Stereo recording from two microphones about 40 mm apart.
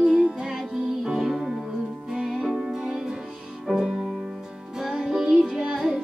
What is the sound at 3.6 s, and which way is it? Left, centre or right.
Music, centre.